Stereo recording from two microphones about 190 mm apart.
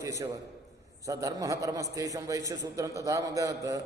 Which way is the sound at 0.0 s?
15° right (ahead or behind).